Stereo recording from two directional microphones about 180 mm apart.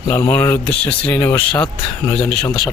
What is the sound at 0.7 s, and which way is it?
Speech, 35° left (ahead or behind).